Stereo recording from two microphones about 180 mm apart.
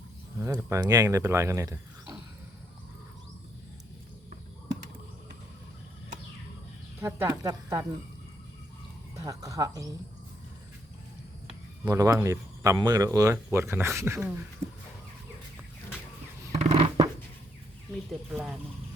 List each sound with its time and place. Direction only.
0.3 s speech: 15° right (ahead or behind)
7.0 s speech: 15° right (ahead or behind)
9.1 s speech: 20° right (ahead or behind)
11.9 s speech: 15° right (ahead or behind)
16.5 s scissors: 35° right (ahead or behind)
18.3 s speech: 10° right (ahead or behind)